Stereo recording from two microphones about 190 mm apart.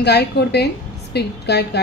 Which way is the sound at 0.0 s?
60° left (ahead or behind).